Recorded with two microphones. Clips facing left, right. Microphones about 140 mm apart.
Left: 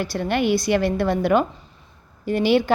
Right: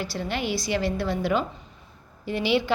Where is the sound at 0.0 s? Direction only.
55° left (ahead or behind).